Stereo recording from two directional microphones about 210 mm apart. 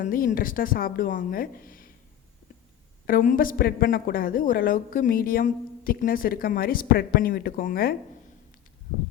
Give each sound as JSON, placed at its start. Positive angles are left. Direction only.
{"t": 0.0, "sound": "speech", "side_deg": 40}
{"t": 3.1, "sound": "speech", "side_deg": 40}